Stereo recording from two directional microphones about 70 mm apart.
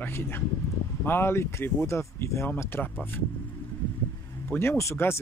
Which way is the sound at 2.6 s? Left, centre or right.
Left.